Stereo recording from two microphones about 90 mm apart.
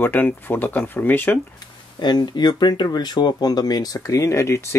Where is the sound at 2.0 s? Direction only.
55° left (ahead or behind).